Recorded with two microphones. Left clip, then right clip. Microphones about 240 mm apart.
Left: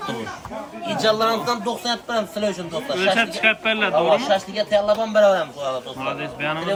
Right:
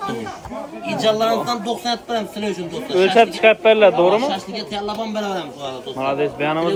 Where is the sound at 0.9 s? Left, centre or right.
Centre.